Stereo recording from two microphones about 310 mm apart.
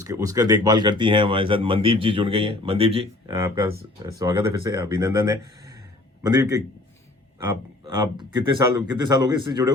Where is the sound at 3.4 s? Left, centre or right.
Centre.